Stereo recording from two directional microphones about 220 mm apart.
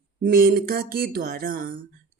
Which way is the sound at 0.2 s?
40° right (ahead or behind).